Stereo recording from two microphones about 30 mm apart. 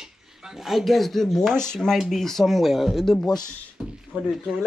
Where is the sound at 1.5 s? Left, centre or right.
Left.